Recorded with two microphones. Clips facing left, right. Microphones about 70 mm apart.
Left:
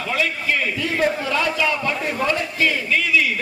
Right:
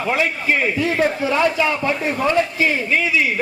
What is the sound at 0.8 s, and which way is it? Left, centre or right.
A man's voice, right.